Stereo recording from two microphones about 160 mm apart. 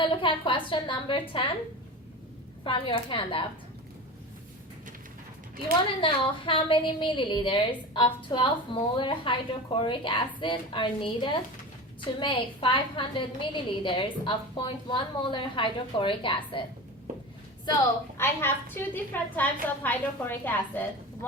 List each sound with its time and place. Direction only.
0.0 s a woman's voice: 30° left (ahead or behind)
2.6 s a woman's voice: 30° left (ahead or behind)
6.0 s a woman's voice: 35° left (ahead or behind)
18.2 s a woman's voice: 15° left (ahead or behind)